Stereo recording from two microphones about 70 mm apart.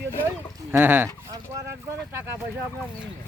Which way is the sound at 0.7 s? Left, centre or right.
Right.